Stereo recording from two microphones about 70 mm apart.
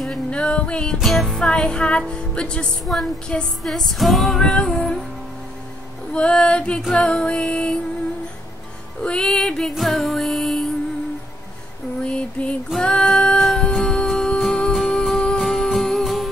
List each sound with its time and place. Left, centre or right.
0.0 s music: centre
0.9 s music: centre
1.4 s speech: centre
2.8 s music: centre
6.1 s speech: centre
9.0 s music: centre
12.0 s a sound: centre
12.7 s music: centre